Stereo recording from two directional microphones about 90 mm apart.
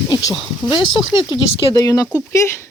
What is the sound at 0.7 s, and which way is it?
Speech, 60° left (ahead or behind).